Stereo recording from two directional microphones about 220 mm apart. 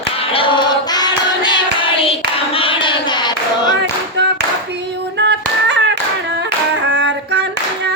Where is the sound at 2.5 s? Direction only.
25° left (ahead or behind).